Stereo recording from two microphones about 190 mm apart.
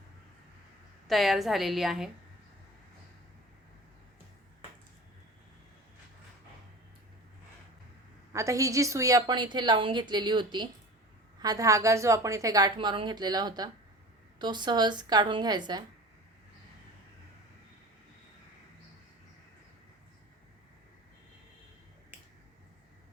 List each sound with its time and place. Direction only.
1.0 s a woman's voice: centre (ahead or behind)
8.3 s a woman's voice: 15° right (ahead or behind)